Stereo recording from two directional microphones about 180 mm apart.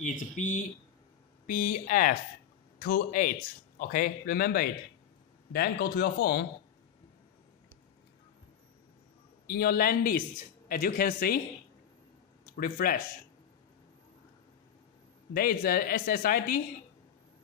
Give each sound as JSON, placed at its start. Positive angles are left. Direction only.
{"t": 0.0, "sound": "a man's voice", "side_deg": 45}
{"t": 9.5, "sound": "a woman's voice", "side_deg": 55}
{"t": 12.5, "sound": "a man's voice", "side_deg": 55}
{"t": 15.3, "sound": "a woman's voice", "side_deg": 55}